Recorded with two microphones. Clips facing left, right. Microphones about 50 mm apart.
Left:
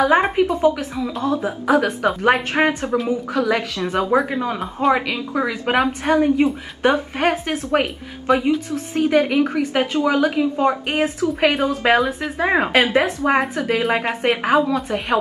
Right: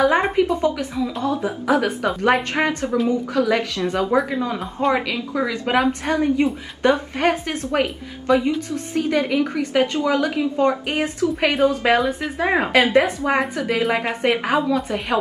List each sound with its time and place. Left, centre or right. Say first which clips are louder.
0.0 s speech: left 1 dB; centre
2.5 s a woman's voice: left 2 dB; centre
3.1 s a woman's voice: right 1 dB; centre